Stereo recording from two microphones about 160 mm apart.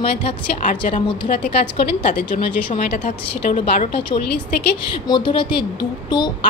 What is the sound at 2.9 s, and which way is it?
Speech, 50° left (ahead or behind).